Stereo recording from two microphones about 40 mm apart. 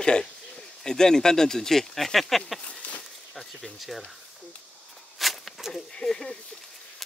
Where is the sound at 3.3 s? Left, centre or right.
Centre.